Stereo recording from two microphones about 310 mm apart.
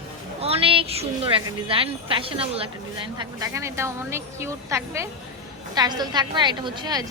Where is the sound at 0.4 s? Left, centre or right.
Centre.